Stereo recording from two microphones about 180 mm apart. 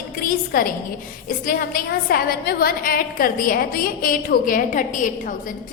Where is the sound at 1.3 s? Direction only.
50° left (ahead or behind).